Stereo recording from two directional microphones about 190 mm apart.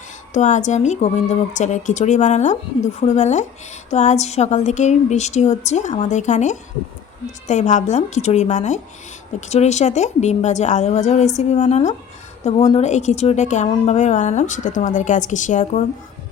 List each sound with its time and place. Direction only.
0.3 s a woman's voice: 40° left (ahead or behind)